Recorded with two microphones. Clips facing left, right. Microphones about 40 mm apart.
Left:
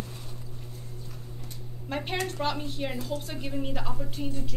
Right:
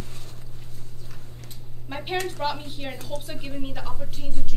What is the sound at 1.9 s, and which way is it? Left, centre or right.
A woman's voice, centre.